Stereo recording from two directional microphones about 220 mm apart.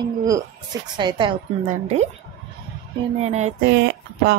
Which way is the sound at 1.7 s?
30° right (ahead or behind).